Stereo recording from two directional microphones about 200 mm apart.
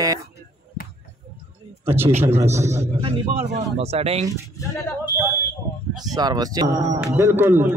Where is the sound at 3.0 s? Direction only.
25° right (ahead or behind).